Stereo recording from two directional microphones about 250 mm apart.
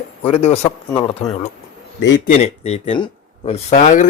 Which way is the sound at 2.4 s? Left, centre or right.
Left.